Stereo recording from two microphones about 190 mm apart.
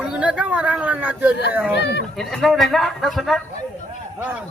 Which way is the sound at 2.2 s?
Centre (ahead or behind).